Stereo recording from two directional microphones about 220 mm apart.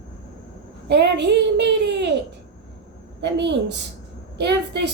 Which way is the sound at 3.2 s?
50° right (ahead or behind).